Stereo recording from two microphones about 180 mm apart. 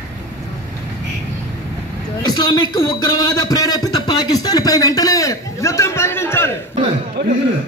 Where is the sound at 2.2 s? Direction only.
20° left (ahead or behind).